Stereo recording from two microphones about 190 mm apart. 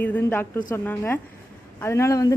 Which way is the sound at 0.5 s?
20° left (ahead or behind).